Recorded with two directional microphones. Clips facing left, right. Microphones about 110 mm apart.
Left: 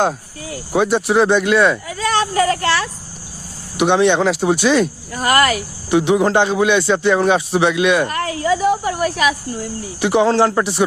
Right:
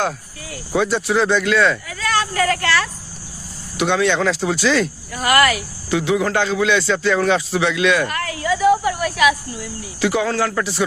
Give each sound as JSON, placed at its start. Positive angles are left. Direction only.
{"t": 0.0, "sound": "speech", "side_deg": 25}
{"t": 1.9, "sound": "a sound", "side_deg": 25}
{"t": 3.8, "sound": "speech", "side_deg": 20}
{"t": 5.1, "sound": "speech", "side_deg": 35}
{"t": 10.0, "sound": "speech", "side_deg": 25}